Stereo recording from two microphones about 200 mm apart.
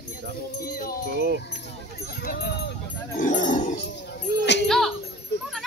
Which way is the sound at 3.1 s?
40° left (ahead or behind).